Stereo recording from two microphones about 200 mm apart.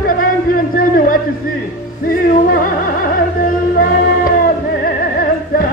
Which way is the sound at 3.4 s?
45° left (ahead or behind).